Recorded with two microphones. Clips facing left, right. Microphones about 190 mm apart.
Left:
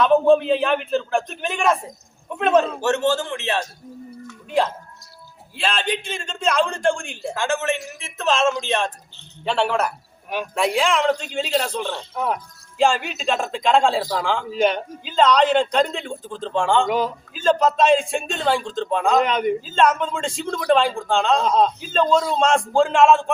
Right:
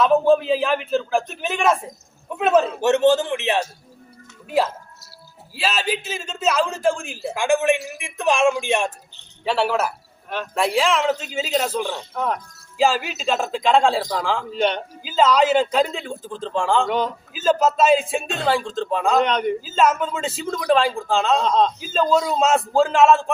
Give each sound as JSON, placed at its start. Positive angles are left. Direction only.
{"t": 0.0, "sound": "speech", "side_deg": 0}
{"t": 2.8, "sound": "a man's voice", "side_deg": -20}
{"t": 4.4, "sound": "speech", "side_deg": -5}
{"t": 10.2, "sound": "speech", "side_deg": 15}
{"t": 10.5, "sound": "speech", "side_deg": 0}
{"t": 12.1, "sound": "speech", "side_deg": 5}
{"t": 21.8, "sound": "a man's voice", "side_deg": -5}